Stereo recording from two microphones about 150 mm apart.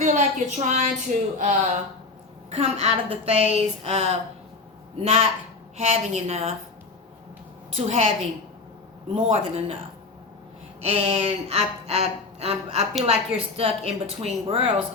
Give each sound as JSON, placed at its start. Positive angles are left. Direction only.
{"t": 0.0, "sound": "a sound", "side_deg": -55}
{"t": 1.4, "sound": "a woman's voice", "side_deg": -55}
{"t": 7.8, "sound": "speech", "side_deg": -45}
{"t": 10.8, "sound": "a woman's voice", "side_deg": -40}